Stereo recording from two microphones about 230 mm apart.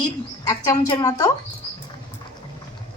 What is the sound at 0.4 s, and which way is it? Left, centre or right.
Speech, centre.